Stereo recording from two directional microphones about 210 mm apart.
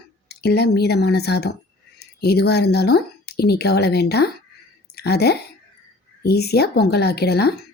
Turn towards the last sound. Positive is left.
turn(degrees=50)  # may be behind; listen again after turning